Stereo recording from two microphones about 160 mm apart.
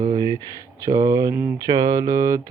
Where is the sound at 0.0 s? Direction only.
30° right (ahead or behind).